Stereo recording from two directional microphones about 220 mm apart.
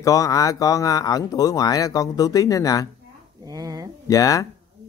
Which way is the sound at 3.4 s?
15° right (ahead or behind).